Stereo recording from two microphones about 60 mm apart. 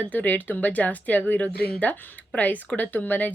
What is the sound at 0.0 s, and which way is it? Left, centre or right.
Speech, left.